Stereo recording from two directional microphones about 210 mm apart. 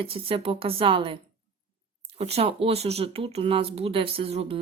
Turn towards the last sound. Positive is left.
turn(degrees=-25)  # may be behind; listen again after turning